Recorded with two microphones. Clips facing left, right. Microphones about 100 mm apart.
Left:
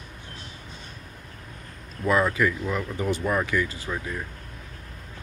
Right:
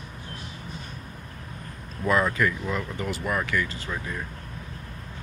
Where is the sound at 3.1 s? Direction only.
25° left (ahead or behind).